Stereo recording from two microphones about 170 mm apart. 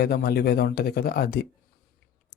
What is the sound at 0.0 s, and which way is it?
A man's voice, 65° left (ahead or behind).